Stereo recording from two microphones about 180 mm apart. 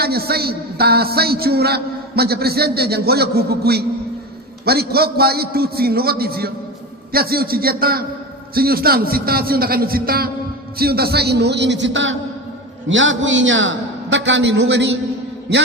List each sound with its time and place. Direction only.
0.0 s a man's voice: 60° right (ahead or behind); by 14.8 s 75° right (ahead or behind)